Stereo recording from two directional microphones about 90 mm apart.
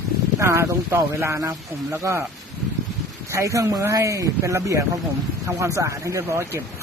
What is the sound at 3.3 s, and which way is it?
Speech, 35° right (ahead or behind).